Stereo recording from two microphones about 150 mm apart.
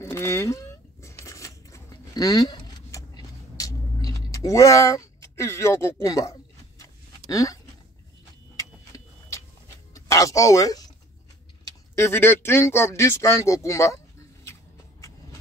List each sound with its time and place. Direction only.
0.0 s a sound: 20° left (ahead or behind)
8.5 s vehicle: 20° left (ahead or behind)
9.9 s speech: 20° left (ahead or behind)
11.9 s speech: 15° left (ahead or behind)